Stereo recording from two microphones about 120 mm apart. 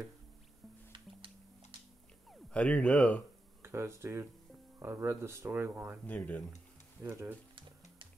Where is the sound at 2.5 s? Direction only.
10° left (ahead or behind).